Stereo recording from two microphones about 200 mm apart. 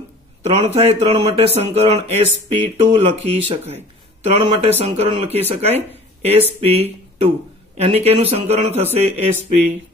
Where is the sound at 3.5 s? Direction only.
30° right (ahead or behind).